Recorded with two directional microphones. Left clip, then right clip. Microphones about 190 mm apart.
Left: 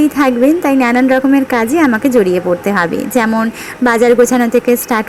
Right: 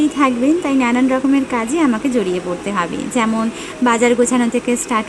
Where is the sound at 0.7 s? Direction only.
5° left (ahead or behind).